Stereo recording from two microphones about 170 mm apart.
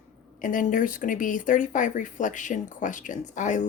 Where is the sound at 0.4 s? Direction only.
50° left (ahead or behind).